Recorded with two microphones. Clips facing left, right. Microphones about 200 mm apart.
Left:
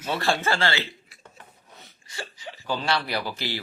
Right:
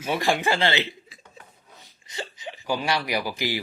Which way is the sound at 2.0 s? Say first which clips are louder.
Right 3 dB; 20° right (ahead or behind).